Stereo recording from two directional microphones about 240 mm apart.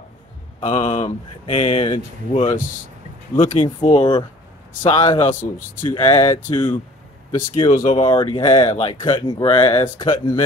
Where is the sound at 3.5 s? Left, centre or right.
Left.